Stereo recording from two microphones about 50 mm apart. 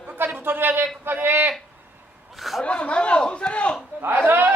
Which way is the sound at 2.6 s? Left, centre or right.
Left.